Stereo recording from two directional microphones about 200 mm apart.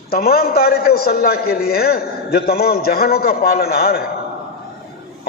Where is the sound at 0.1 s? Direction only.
50° left (ahead or behind).